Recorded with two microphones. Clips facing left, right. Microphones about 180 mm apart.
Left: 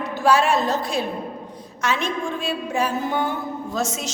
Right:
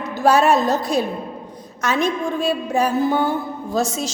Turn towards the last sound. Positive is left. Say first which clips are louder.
# right 4 dB
turn(degrees=-35)  # may be behind; listen again after turning